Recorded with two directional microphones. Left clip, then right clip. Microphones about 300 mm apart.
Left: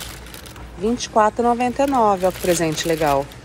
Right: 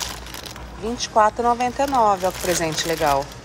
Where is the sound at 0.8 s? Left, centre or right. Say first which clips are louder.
Left 1 dB; centre.